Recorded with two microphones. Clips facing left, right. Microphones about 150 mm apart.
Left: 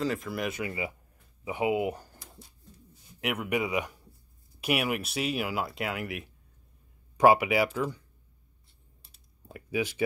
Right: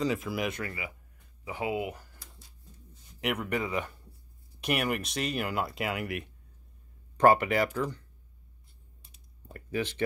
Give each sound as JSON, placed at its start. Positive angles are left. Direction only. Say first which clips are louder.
{"t": 0.0, "sound": "speech", "louder": "right 1 dB", "side_deg": 0}
{"t": 1.4, "sound": "speech", "louder": "left 5 dB", "side_deg": 20}
{"t": 2.0, "sound": "a sound", "louder": "left 5 dB", "side_deg": 25}
{"t": 2.9, "sound": "a man's voice", "louder": "right 1 dB", "side_deg": 5}
{"t": 9.0, "sound": "computer keyboard", "louder": "even", "side_deg": 10}